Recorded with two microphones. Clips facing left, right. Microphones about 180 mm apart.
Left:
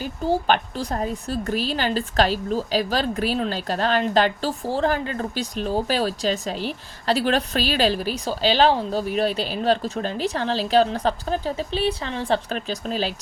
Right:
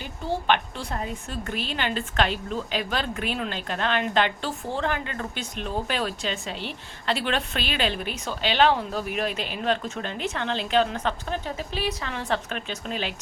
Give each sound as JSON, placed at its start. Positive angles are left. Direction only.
{"t": 0.0, "sound": "a woman's voice", "side_deg": 40}